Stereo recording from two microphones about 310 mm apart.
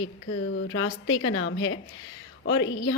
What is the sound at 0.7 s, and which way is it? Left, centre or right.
A woman's voice, left.